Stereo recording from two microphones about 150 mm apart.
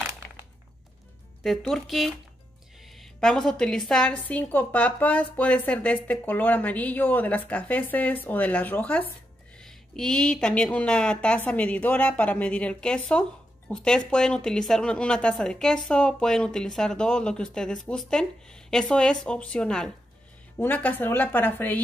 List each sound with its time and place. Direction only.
1.4 s a woman's voice: centre (ahead or behind)